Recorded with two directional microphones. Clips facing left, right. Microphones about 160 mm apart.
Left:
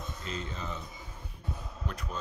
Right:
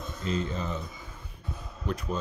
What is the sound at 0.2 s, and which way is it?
Speech, 35° right (ahead or behind).